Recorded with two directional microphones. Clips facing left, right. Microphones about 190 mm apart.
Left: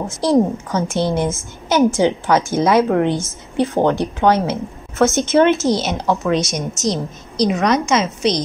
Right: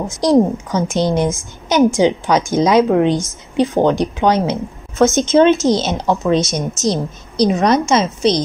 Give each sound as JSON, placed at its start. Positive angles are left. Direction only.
{"t": 0.2, "sound": "a woman's voice", "side_deg": -15}